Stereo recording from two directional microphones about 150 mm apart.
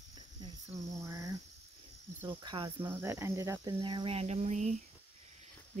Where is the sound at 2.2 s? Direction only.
35° right (ahead or behind).